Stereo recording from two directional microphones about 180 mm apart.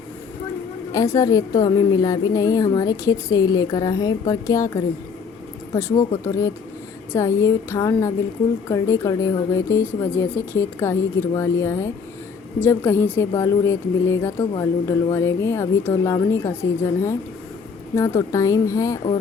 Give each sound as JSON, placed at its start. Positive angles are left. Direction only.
{"t": 0.9, "sound": "a woman's voice", "side_deg": 20}
{"t": 6.2, "sound": "speech", "side_deg": 15}